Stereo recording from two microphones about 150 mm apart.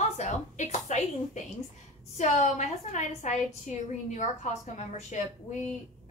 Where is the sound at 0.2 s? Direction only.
50° left (ahead or behind).